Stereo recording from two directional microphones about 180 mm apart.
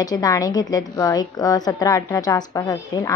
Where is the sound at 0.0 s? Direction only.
20° left (ahead or behind).